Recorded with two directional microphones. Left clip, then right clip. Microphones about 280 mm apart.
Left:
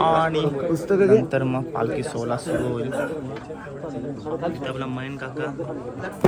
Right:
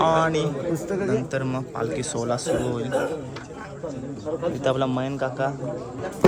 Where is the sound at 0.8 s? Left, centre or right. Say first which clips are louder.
Left 8 dB; centre.